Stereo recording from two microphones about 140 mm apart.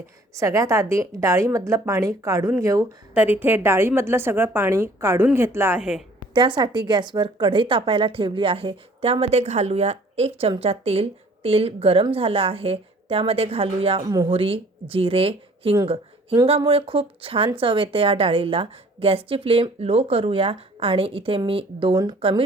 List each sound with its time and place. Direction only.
0.3 s a woman's voice: 20° right (ahead or behind)
3.2 s a woman's voice: 10° right (ahead or behind)
6.3 s a woman's voice: 35° right (ahead or behind)